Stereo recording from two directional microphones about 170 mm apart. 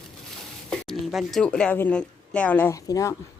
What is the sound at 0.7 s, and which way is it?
Speech, centre (ahead or behind).